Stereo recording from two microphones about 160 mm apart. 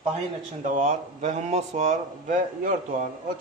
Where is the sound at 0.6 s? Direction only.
50° right (ahead or behind).